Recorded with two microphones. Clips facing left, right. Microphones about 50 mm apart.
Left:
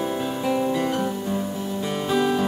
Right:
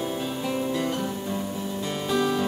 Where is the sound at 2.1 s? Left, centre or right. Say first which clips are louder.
Left 3 dB; centre.